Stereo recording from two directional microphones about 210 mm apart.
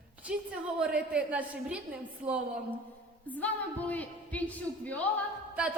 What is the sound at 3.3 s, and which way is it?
A woman's voice, 5° left (ahead or behind).